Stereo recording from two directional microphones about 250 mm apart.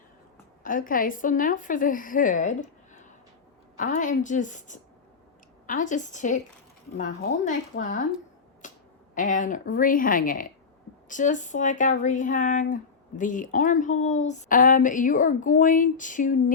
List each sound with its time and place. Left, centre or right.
0.6 s a woman's voice: left
8.6 s finger snapping: left
9.1 s speech: left